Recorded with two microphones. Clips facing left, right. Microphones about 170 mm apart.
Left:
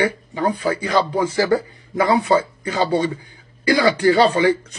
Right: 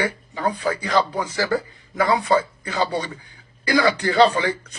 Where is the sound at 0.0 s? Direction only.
30° left (ahead or behind).